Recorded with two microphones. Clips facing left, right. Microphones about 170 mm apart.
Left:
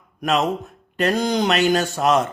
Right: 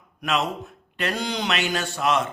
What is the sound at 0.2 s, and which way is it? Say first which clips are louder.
A man's voice: left 5 dB; 40° left (ahead or behind).